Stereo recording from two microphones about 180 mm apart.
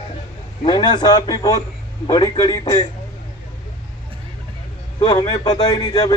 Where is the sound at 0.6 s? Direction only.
25° left (ahead or behind).